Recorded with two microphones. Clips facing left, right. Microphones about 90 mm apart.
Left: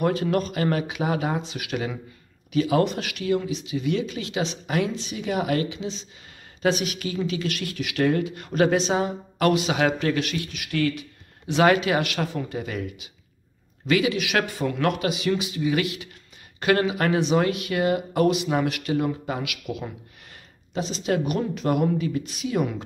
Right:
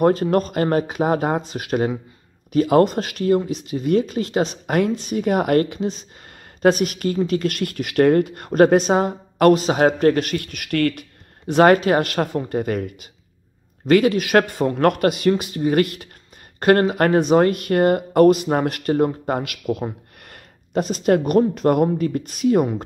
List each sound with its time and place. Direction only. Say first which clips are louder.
0.0 s a woman's voice: right 6 dB; 40° right (ahead or behind)
20.2 s a woman's voice: right 4 dB; 55° right (ahead or behind)